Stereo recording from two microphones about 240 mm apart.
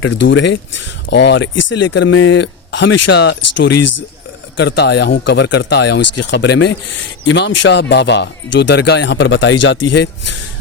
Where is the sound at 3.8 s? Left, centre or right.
Left.